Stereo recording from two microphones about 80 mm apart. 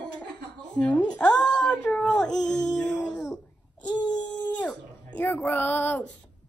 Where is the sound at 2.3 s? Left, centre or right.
Left.